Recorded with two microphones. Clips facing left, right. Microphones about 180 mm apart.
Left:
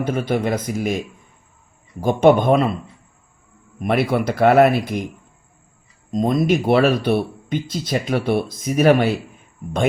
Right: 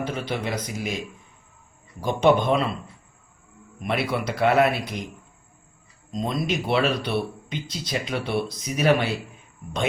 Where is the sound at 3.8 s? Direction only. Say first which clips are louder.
Left 7 dB; 50° left (ahead or behind).